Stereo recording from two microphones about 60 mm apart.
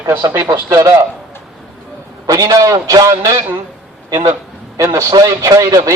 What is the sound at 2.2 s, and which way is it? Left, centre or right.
A man's voice, right.